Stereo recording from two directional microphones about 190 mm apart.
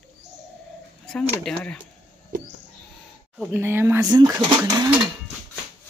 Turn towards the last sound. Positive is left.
turn(degrees=-15)  # may be behind; listen again after turning